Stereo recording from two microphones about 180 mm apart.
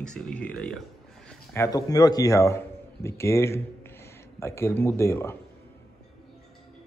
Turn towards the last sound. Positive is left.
turn(degrees=15)  # may be behind; listen again after turning